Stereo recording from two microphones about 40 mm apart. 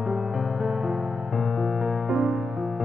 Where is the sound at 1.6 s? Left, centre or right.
Centre.